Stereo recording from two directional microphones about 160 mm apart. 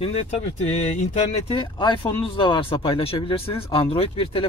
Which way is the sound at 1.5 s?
30° left (ahead or behind).